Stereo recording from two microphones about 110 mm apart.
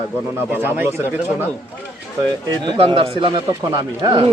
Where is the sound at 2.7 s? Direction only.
60° right (ahead or behind); by 4.2 s 35° right (ahead or behind).